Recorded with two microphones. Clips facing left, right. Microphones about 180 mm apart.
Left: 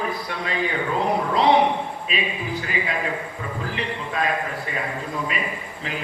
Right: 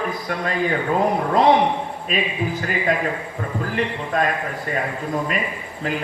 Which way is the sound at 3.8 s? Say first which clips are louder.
Right 6 dB; 45° right (ahead or behind).